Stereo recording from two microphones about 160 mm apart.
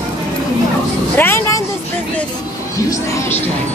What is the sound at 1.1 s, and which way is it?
Speech, 15° left (ahead or behind).